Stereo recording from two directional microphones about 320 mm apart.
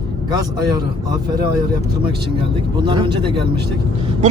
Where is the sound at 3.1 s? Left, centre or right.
Right.